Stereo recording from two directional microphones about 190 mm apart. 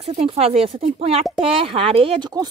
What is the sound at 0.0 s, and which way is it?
Speech, 30° right (ahead or behind).